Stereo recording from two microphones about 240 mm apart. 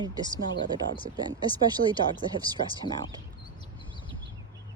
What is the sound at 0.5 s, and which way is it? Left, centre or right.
Speech, left.